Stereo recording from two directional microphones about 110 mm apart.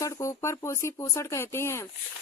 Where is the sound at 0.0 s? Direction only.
25° left (ahead or behind).